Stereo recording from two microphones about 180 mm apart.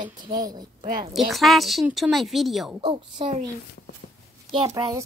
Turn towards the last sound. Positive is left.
turn(degrees=-20)  # may be behind; listen again after turning